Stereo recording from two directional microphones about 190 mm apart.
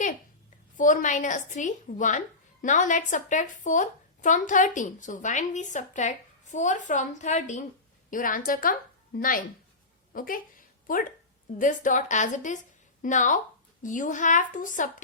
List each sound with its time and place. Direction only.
0.8 s a woman's voice: 45° left (ahead or behind)
11.5 s a woman's voice: 45° left (ahead or behind)